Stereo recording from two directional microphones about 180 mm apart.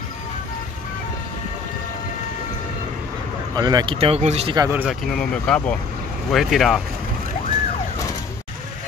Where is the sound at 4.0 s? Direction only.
35° right (ahead or behind).